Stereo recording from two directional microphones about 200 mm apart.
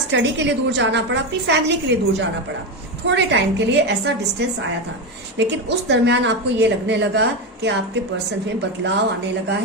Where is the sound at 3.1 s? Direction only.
60° right (ahead or behind).